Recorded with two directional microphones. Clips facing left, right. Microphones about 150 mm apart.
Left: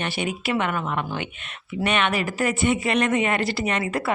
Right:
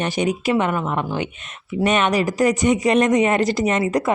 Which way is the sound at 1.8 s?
40° right (ahead or behind).